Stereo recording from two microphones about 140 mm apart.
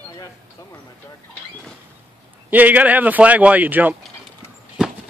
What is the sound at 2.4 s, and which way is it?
Speech, 10° right (ahead or behind).